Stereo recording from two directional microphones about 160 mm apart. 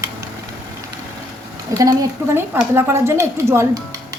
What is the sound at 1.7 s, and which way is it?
A woman's voice, 20° right (ahead or behind).